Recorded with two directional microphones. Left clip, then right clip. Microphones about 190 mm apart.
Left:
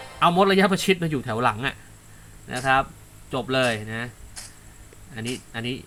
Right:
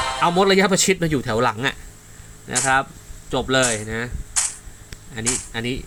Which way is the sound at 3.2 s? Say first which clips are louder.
Right 3 dB; 15° right (ahead or behind).